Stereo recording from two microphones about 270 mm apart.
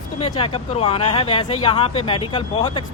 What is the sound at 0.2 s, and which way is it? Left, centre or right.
Speech, left.